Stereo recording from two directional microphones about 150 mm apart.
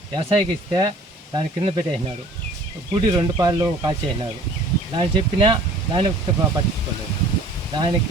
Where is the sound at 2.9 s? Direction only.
30° right (ahead or behind).